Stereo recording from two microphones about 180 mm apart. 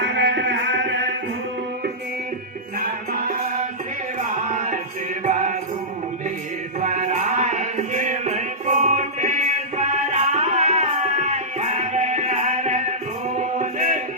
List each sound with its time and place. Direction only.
0.1 s music: 75° right (ahead or behind)
2.7 s music: 50° right (ahead or behind)
4.4 s music: 40° right (ahead or behind)
6.7 s music: 40° right (ahead or behind)